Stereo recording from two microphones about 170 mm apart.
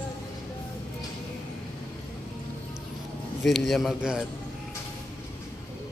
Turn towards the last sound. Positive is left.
turn(degrees=-5)  # may be behind; listen again after turning